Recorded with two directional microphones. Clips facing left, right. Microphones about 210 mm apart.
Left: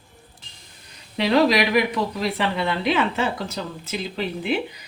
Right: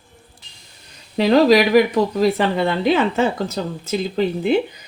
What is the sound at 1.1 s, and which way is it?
Speech, 45° right (ahead or behind).